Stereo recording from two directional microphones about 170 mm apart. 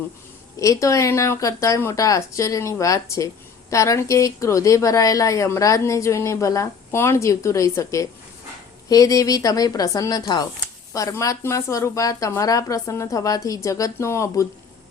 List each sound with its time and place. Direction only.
0.6 s a woman's voice: 20° left (ahead or behind)